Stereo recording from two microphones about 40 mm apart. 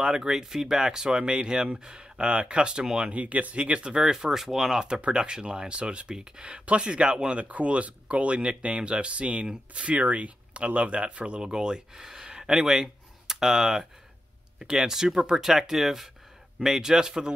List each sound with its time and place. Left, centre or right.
0.0 s speech: centre
3.1 s speech: right
4.0 s speech: centre